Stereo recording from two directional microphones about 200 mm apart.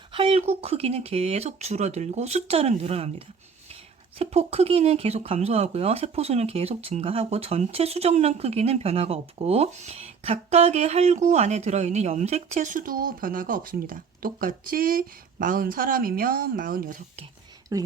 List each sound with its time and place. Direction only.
0.1 s speech: 25° right (ahead or behind); by 17.0 s 45° right (ahead or behind)
17.7 s speech: 20° right (ahead or behind)